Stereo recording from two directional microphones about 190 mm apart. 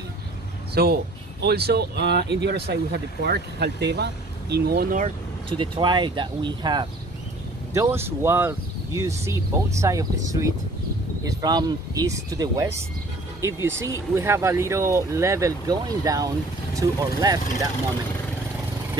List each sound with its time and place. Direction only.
0.8 s speech: 55° right (ahead or behind)
5.6 s speech: 25° right (ahead or behind)